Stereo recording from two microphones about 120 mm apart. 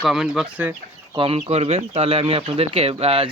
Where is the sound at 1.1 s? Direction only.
40° right (ahead or behind).